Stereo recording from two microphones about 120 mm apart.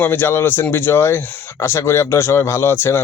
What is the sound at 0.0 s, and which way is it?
Speech, 20° left (ahead or behind).